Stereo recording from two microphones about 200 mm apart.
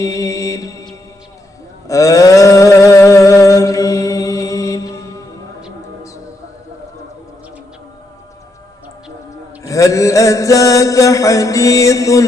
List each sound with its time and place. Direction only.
0.0 s music: 15° left (ahead or behind)
1.9 s a sound: 15° left (ahead or behind)
9.6 s mantra: 15° left (ahead or behind)